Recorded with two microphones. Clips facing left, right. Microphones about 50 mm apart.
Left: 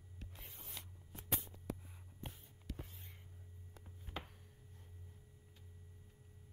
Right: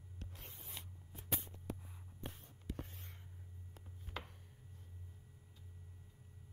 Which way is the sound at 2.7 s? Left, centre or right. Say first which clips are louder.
Right 3 dB; right.